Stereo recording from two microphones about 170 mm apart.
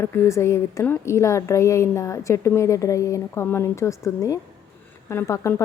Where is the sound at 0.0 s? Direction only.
15° left (ahead or behind).